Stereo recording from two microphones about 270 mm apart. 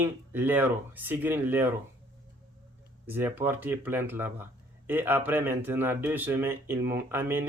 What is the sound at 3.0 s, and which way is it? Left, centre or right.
Speech, centre.